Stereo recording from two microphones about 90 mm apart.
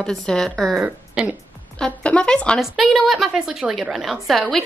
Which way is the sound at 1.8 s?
10° left (ahead or behind).